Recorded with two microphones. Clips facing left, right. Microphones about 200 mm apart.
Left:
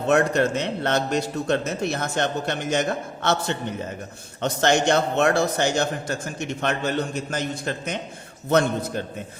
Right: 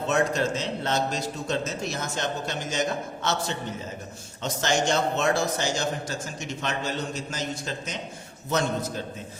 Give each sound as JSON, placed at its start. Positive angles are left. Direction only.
{"t": 0.1, "sound": "a man's voice", "side_deg": 60}